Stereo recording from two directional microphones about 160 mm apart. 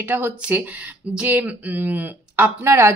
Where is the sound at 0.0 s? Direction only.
10° right (ahead or behind).